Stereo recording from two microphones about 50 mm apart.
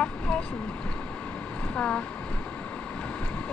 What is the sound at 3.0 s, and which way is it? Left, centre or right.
Boat, left.